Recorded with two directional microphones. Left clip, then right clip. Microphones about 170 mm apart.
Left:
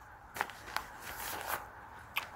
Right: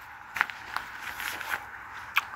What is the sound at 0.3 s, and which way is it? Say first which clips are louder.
Walk: right 9 dB; 25° left (ahead or behind).